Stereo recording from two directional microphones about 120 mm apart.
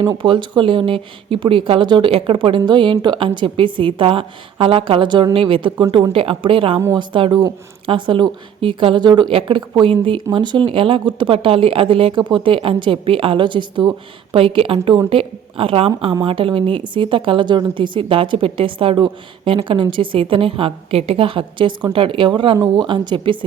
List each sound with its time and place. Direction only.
0.2 s a woman's voice: 45° right (ahead or behind)